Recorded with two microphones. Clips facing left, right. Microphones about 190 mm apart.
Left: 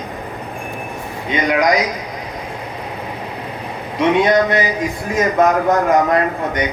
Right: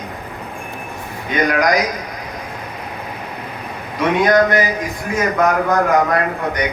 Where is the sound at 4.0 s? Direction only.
25° left (ahead or behind).